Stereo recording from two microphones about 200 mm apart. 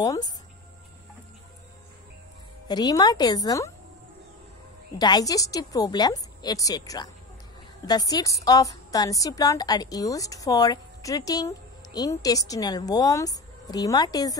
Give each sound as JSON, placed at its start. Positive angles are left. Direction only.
{"t": 0.0, "sound": "a woman's voice", "side_deg": 15}
{"t": 2.7, "sound": "a woman's voice", "side_deg": 20}
{"t": 4.9, "sound": "a woman's voice", "side_deg": 20}